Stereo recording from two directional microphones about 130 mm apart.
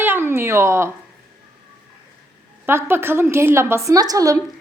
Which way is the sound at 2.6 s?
20° right (ahead or behind).